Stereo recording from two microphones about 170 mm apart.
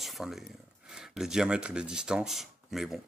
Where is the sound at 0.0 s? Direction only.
Centre (ahead or behind).